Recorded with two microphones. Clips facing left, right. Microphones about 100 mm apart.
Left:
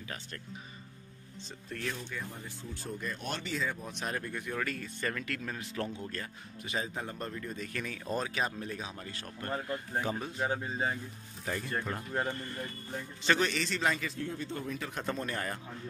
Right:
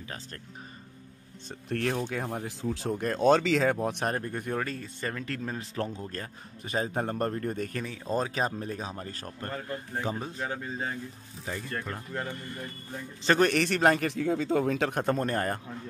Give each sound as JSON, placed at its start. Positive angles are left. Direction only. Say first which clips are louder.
{"t": 1.7, "sound": "speech", "louder": "right 9 dB", "side_deg": -65}
{"t": 4.3, "sound": "speech", "louder": "right 4 dB", "side_deg": -40}
{"t": 6.9, "sound": "speech", "louder": "right 9 dB", "side_deg": -50}
{"t": 7.8, "sound": "speech", "louder": "right 4 dB", "side_deg": -25}
{"t": 8.2, "sound": "speech", "louder": "right 5 dB", "side_deg": -35}
{"t": 10.0, "sound": "speech", "louder": "right 2 dB", "side_deg": -30}
{"t": 10.4, "sound": "speech", "louder": "left 3 dB", "side_deg": 20}
{"t": 11.5, "sound": "speech", "louder": "even", "side_deg": -20}
{"t": 12.1, "sound": "speech", "louder": "left 2 dB", "side_deg": 15}
{"t": 13.2, "sound": "speech", "louder": "right 5 dB", "side_deg": -40}
{"t": 13.5, "sound": "speech", "louder": "right 8 dB", "side_deg": -60}
{"t": 15.0, "sound": "speech", "louder": "right 7 dB", "side_deg": -45}